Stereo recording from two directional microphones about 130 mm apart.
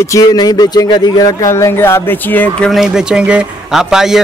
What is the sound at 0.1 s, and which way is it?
Speech, 30° left (ahead or behind).